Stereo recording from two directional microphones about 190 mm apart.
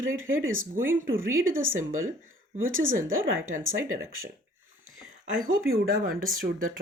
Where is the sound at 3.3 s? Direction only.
90° right.